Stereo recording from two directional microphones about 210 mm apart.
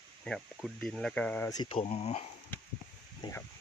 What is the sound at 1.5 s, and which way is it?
Speech, 20° left (ahead or behind).